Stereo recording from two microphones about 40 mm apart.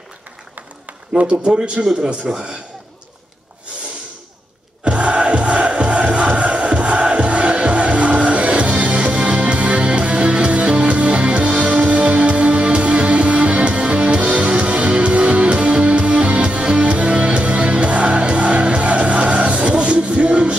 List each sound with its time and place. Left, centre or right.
1.4 s speech: right
4.8 s music: right